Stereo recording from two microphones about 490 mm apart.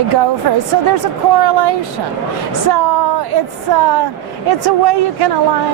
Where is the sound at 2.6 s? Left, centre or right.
Right.